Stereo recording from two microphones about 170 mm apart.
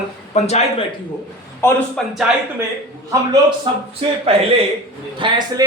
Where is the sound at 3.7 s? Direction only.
30° right (ahead or behind).